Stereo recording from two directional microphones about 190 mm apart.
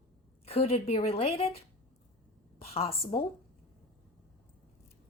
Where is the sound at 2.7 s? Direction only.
30° left (ahead or behind).